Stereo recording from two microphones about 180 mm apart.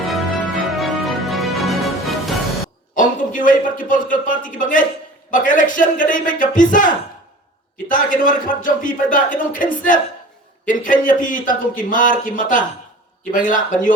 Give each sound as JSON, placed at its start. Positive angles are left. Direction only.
{"t": 0.0, "sound": "music", "side_deg": 0}
{"t": 2.9, "sound": "a man's voice", "side_deg": 50}